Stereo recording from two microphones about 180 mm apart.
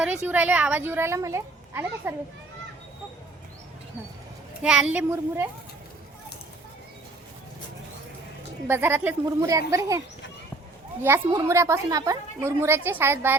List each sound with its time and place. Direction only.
0.0 s a woman's voice: 5° right (ahead or behind)
4.6 s a woman's voice: 5° right (ahead or behind)
8.6 s a woman's voice: 10° right (ahead or behind)
11.0 s a woman's voice: 15° right (ahead or behind)